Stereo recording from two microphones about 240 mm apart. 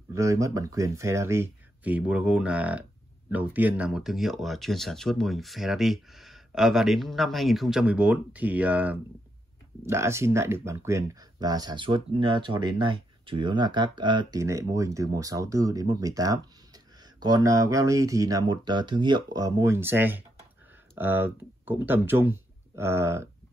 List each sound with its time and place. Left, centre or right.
0.1 s speech: centre